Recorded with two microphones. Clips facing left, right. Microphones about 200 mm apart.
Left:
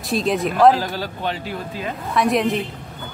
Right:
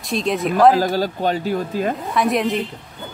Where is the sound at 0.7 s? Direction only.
40° right (ahead or behind).